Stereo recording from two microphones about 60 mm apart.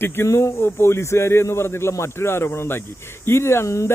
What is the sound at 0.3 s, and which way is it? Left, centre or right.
Speech, left.